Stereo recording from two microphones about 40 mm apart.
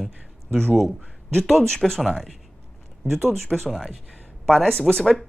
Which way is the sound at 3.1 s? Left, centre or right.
Right.